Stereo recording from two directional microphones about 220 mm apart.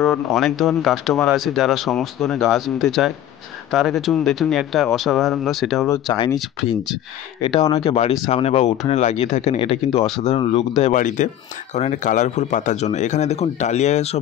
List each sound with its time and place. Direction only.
0.0 s speech: centre (ahead or behind)
5.9 s speech: 20° left (ahead or behind)
7.4 s speech: 20° left (ahead or behind)